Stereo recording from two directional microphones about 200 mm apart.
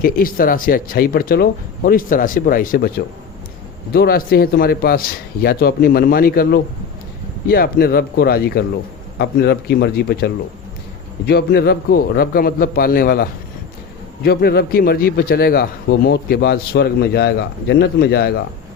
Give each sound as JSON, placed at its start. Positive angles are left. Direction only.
{"t": 0.0, "sound": "a man's voice", "side_deg": 45}
{"t": 3.9, "sound": "a man's voice", "side_deg": 50}
{"t": 14.3, "sound": "a man's voice", "side_deg": 50}